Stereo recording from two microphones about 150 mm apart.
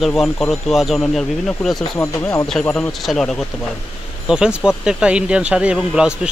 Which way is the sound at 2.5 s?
5° left (ahead or behind).